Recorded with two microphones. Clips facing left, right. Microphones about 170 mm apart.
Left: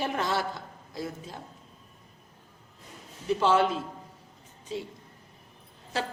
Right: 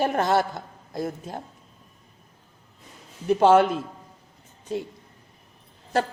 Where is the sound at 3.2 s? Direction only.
50° right (ahead or behind).